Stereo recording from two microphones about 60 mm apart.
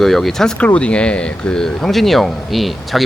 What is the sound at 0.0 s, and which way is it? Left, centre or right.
Speech, centre.